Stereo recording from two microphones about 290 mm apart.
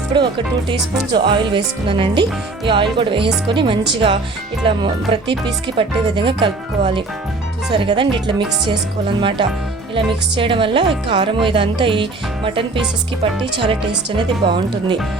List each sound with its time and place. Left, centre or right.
0.1 s speech: centre
13.4 s speech: centre